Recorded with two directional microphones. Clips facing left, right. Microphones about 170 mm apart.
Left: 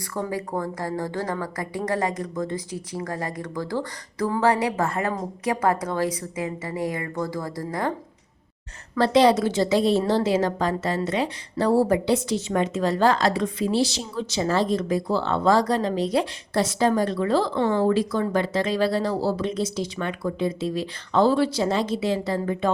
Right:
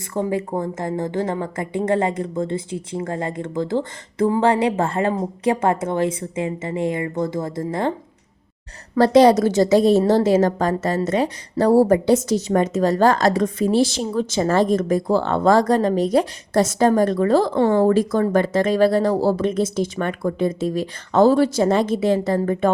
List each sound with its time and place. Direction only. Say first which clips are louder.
0.1 s a woman's voice: right 5 dB; 20° right (ahead or behind)
9.0 s a woman's voice: right 5 dB; 40° right (ahead or behind)